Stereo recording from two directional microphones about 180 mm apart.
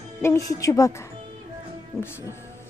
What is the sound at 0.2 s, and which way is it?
Speech, 15° left (ahead or behind).